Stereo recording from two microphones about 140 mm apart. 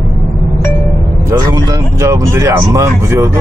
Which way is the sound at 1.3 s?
25° right (ahead or behind).